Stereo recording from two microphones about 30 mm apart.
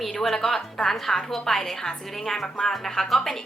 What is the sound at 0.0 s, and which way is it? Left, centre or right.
A woman's voice, centre.